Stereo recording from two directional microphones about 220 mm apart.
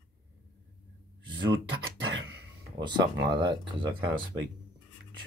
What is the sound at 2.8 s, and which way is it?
Speech, 20° right (ahead or behind).